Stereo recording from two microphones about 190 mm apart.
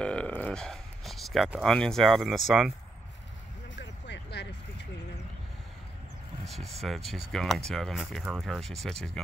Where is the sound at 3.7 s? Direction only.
65° left (ahead or behind).